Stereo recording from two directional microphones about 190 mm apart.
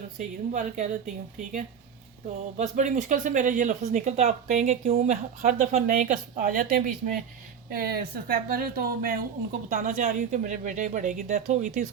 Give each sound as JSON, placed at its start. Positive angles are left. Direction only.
{"t": 0.2, "sound": "speech", "side_deg": -40}
{"t": 2.6, "sound": "speech", "side_deg": -40}